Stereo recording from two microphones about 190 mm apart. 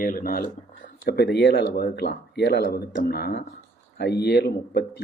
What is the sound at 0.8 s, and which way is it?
Speech, 60° left (ahead or behind).